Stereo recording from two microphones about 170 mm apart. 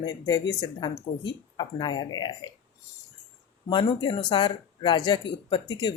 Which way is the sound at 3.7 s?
25° left (ahead or behind).